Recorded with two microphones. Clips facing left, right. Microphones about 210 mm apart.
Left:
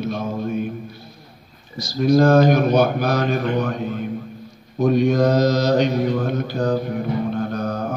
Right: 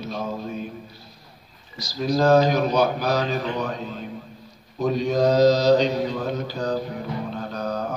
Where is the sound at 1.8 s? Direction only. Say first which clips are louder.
Left 6 dB; 50° left (ahead or behind).